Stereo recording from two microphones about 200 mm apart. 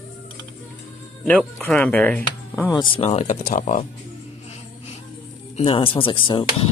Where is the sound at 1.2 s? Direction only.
5° left (ahead or behind).